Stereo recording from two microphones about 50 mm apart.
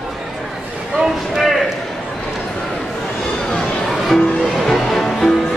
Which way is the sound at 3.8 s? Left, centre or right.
Centre.